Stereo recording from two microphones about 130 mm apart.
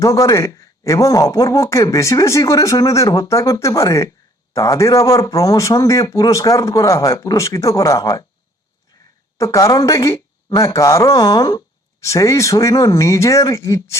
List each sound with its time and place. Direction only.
0.0 s a man's voice: 25° left (ahead or behind)
9.4 s a man's voice: 25° left (ahead or behind)